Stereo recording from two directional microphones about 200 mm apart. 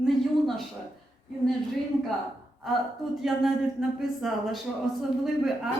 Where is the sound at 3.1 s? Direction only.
Centre (ahead or behind).